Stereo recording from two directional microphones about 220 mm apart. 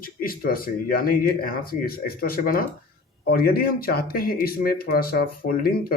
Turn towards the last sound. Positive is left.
turn(degrees=40)  # may be behind; listen again after turning